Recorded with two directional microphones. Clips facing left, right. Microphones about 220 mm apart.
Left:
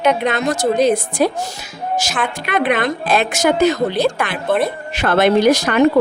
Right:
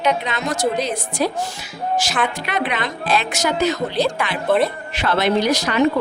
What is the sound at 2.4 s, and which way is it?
A woman's voice, 50° left (ahead or behind).